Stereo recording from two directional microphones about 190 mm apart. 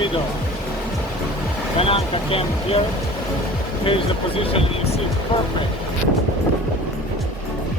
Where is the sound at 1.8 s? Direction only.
30° left (ahead or behind).